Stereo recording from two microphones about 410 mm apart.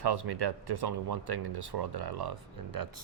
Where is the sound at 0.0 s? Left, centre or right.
Right.